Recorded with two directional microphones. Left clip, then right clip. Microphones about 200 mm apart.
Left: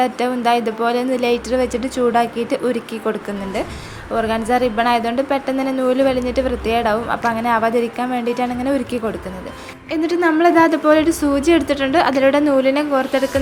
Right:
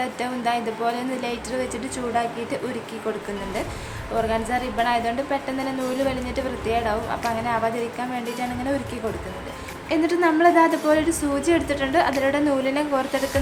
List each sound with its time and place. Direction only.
0.0 s a woman's voice: 25° left (ahead or behind)
4.1 s a woman's voice: 25° left (ahead or behind)